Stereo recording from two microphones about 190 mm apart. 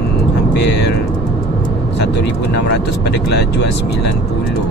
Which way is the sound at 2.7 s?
60° left (ahead or behind).